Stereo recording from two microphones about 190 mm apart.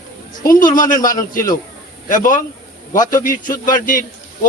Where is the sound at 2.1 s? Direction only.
45° left (ahead or behind).